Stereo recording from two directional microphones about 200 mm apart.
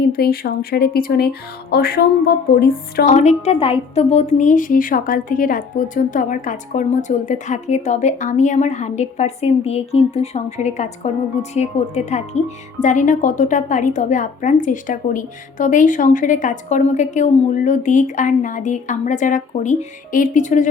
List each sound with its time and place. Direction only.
0.1 s speech: 50° left (ahead or behind)
3.1 s a woman's voice: 35° left (ahead or behind)